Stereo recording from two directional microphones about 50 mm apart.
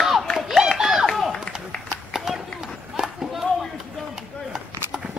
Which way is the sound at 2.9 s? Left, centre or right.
Centre.